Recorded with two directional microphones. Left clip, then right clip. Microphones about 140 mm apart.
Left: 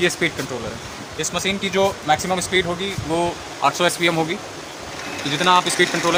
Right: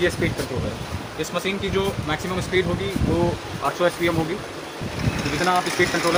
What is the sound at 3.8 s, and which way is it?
Speech, 90° left.